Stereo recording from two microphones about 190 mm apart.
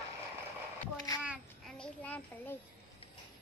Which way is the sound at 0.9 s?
20° left (ahead or behind).